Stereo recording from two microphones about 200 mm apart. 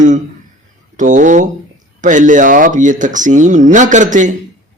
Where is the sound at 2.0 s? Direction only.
40° right (ahead or behind).